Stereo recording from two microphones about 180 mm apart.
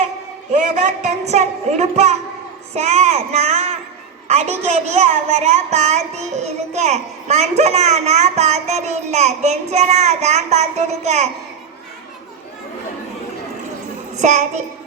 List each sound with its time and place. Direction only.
0.5 s a woman's voice: 40° right (ahead or behind)
14.2 s a woman's voice: 40° right (ahead or behind)